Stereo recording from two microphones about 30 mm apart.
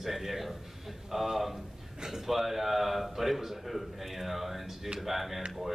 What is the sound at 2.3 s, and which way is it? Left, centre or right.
A man's voice, centre.